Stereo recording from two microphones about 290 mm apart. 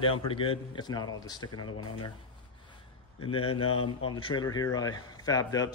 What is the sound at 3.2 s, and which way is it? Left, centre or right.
Speech, centre.